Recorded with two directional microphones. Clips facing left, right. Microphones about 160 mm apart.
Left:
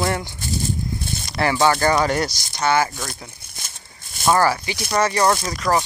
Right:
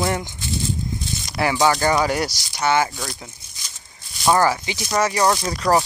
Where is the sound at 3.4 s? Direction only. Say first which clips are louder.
Left 4 dB; 60° left (ahead or behind).